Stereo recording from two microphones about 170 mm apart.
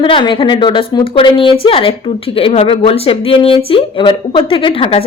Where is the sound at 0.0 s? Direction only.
30° left (ahead or behind).